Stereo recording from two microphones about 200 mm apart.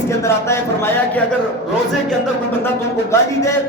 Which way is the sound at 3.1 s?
15° left (ahead or behind).